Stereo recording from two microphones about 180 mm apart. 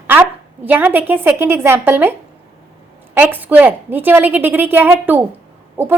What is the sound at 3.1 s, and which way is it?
A woman's voice, 10° right (ahead or behind).